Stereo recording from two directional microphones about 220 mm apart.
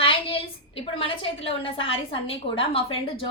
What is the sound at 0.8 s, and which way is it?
A woman's voice, 25° left (ahead or behind).